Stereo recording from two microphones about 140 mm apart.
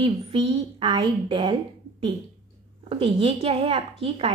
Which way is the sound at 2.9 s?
40° right (ahead or behind).